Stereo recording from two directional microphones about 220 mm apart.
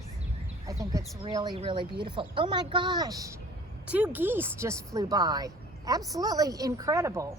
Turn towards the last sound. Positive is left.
turn(degrees=-15)  # may be behind; listen again after turning